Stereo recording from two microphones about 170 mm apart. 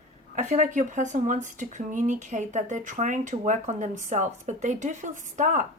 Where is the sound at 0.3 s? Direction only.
45° right (ahead or behind).